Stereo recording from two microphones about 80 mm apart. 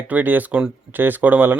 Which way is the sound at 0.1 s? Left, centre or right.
Right.